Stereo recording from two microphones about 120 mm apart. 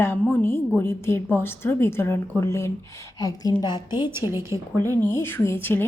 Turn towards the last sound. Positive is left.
turn(degrees=15)  # may be behind; listen again after turning